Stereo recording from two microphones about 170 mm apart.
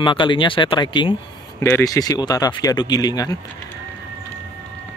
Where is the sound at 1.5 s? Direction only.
15° left (ahead or behind).